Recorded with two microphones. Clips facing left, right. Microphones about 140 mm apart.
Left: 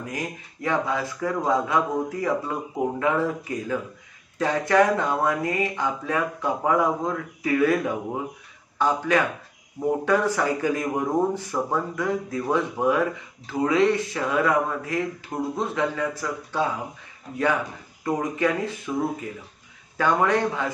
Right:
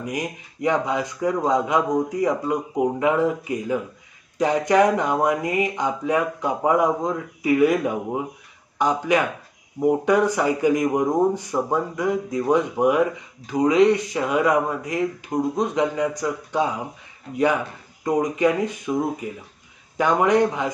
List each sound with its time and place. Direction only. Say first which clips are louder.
0.0 s a man's voice: right 4 dB; 15° right (ahead or behind)
18.0 s a man's voice: right 4 dB; 15° right (ahead or behind)